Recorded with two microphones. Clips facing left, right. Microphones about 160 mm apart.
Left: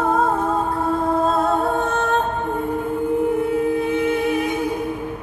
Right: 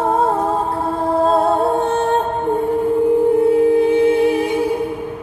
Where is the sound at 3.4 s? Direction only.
30° right (ahead or behind).